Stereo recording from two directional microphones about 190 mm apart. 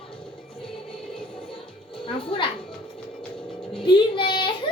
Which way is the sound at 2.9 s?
Centre (ahead or behind).